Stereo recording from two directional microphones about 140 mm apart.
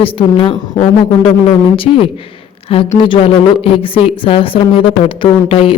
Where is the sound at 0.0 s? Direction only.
40° left (ahead or behind).